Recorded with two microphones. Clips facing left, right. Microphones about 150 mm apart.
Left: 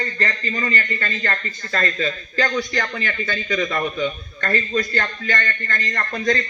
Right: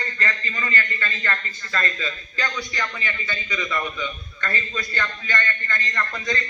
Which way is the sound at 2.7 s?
50° left (ahead or behind).